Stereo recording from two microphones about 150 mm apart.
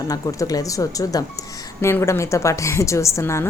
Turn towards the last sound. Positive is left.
turn(degrees=20)  # may be behind; listen again after turning